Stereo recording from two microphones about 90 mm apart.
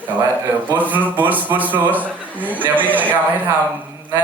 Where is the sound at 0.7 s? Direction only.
20° right (ahead or behind).